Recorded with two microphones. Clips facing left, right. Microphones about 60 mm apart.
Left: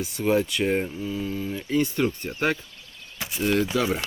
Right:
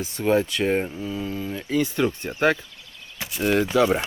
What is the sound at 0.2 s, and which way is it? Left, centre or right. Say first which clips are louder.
Speech: right 2 dB; right.